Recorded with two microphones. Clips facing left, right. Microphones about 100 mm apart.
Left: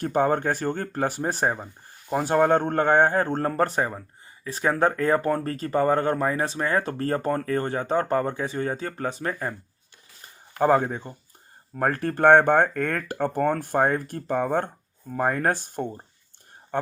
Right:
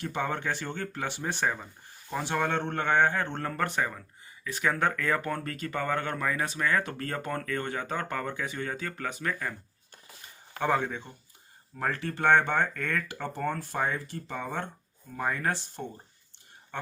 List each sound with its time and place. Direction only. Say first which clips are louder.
0.0 s speech: left 9 dB; 45° left (ahead or behind)
10.6 s a man's voice: left 7 dB; 40° left (ahead or behind)